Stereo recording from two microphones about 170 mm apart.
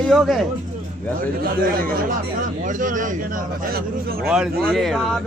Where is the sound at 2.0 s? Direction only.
50° right (ahead or behind).